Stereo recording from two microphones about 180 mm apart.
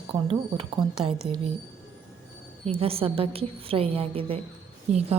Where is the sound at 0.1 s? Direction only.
30° right (ahead or behind).